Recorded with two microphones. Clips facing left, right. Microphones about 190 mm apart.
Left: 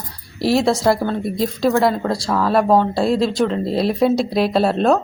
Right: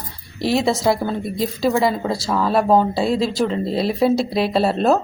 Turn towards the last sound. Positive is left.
turn(degrees=0)  # may be behind; listen again after turning